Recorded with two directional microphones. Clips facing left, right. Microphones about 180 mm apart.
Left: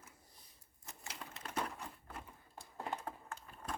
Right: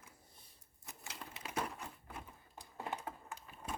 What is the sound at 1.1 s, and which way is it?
Wood, 5° right (ahead or behind).